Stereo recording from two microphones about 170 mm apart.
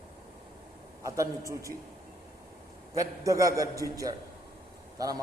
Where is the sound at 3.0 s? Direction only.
20° right (ahead or behind).